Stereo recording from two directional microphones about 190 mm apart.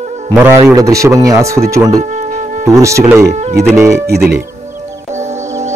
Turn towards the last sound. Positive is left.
turn(degrees=0)  # may be behind; listen again after turning